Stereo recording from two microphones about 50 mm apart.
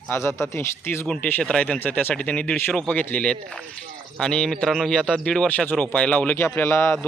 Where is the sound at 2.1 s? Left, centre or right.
Left.